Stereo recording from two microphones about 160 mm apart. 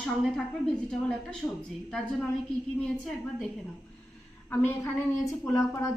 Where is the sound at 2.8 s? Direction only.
5° left (ahead or behind).